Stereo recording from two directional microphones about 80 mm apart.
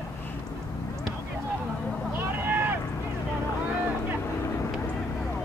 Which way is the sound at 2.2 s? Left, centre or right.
Right.